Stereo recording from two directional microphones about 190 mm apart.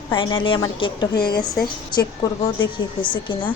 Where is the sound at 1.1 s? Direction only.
55° left (ahead or behind).